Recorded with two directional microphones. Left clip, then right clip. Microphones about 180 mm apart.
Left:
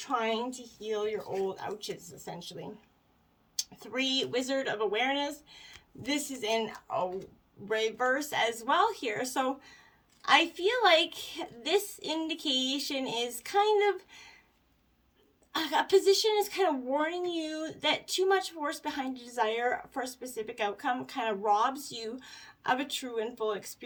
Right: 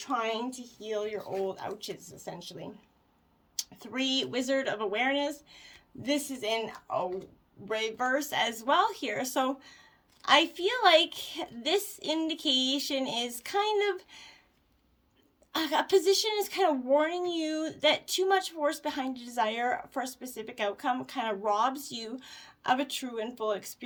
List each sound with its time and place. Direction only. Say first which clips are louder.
0.0 s speech: even; 25° right (ahead or behind)
1.2 s speech: even; 15° right (ahead or behind)
1.5 s a woman's voice: even; 30° right (ahead or behind)
15.5 s a woman's voice: even; 35° right (ahead or behind)